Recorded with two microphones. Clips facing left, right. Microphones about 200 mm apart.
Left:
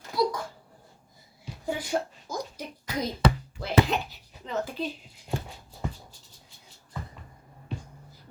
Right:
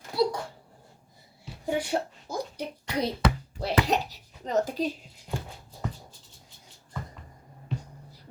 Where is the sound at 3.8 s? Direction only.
40° right (ahead or behind).